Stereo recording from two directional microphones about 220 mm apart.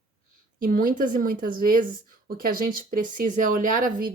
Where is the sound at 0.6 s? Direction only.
40° right (ahead or behind).